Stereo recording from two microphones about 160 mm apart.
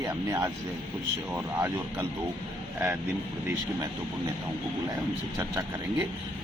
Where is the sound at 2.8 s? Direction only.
15° right (ahead or behind).